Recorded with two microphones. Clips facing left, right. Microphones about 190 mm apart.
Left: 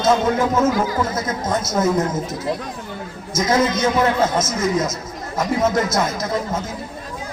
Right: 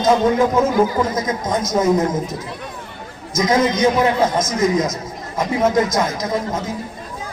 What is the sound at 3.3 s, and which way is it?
A man's voice, 15° right (ahead or behind).